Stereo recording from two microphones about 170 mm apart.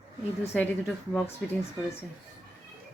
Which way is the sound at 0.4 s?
10° left (ahead or behind).